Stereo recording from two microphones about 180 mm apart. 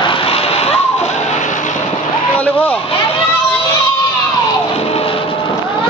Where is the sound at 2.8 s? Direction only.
30° left (ahead or behind).